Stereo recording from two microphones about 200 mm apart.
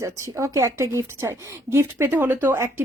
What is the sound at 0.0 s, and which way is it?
A woman's voice, 15° right (ahead or behind).